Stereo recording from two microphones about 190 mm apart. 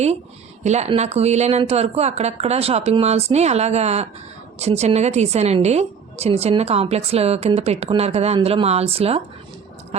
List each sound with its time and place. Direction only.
0.6 s a woman's voice: 35° right (ahead or behind)